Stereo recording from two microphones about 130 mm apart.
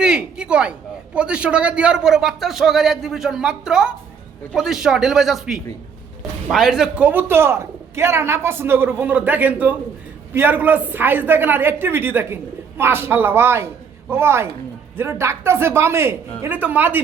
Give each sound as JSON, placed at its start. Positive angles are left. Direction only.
{"t": 0.0, "sound": "a man's voice", "side_deg": -5}